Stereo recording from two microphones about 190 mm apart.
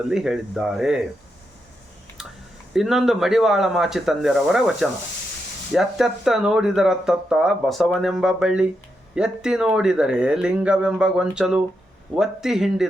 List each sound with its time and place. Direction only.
0.1 s speech: centre (ahead or behind)
2.7 s speech: centre (ahead or behind)